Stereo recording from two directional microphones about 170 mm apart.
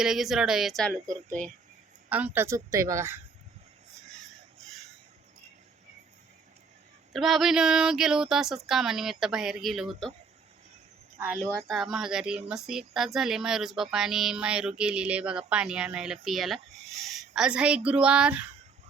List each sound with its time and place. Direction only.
0.0 s speech: centre (ahead or behind)
1.1 s speech: 50° right (ahead or behind)
2.0 s a woman's voice: 10° right (ahead or behind)
7.1 s speech: centre (ahead or behind)
11.7 s speech: centre (ahead or behind)